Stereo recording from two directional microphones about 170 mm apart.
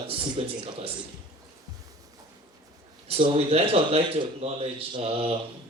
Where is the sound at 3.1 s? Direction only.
35° right (ahead or behind).